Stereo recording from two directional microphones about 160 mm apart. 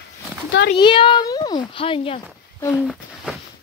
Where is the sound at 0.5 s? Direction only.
90° left.